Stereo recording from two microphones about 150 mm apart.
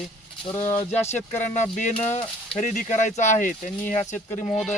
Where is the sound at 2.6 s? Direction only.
50° left (ahead or behind).